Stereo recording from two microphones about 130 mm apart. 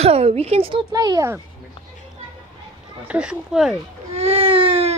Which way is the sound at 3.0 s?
5° right (ahead or behind).